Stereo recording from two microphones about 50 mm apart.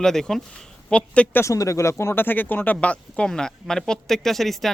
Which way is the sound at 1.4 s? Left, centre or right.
Left.